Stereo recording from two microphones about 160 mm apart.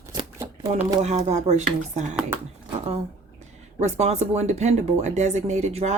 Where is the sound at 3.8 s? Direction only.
45° right (ahead or behind).